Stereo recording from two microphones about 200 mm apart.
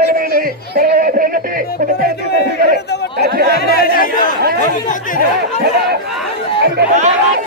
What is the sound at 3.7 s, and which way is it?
Chatter, 50° left (ahead or behind).